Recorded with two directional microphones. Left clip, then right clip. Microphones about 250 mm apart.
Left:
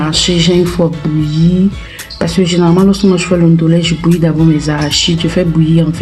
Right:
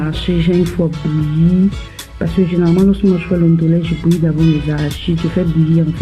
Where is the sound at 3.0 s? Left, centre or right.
Left.